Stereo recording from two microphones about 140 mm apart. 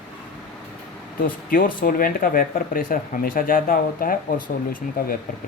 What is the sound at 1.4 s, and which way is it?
Speech, 90° left.